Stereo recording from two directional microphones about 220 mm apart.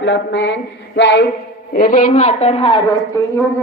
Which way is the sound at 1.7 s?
40° left (ahead or behind).